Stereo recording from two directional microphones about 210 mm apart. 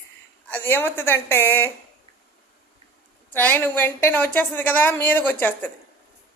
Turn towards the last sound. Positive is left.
turn(degrees=10)  # may be behind; listen again after turning